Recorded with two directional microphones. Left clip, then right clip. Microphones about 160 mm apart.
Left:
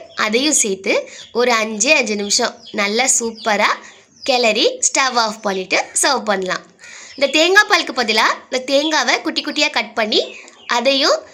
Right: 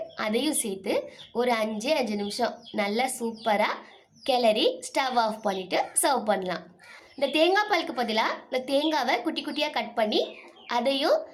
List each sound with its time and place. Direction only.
0.2 s a woman's voice: 20° left (ahead or behind)